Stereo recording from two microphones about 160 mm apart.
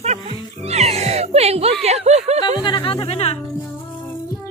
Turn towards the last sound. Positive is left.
turn(degrees=40)  # may be behind; listen again after turning